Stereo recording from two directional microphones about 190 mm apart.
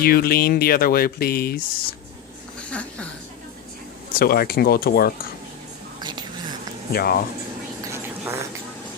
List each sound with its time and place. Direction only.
0.0 s speech: 50° left (ahead or behind)
2.6 s speech: 5° left (ahead or behind)
4.1 s speech: 50° left (ahead or behind)
6.0 s whispering: 25° right (ahead or behind)
6.9 s speech: 55° left (ahead or behind)
7.9 s vehicle: 10° right (ahead or behind)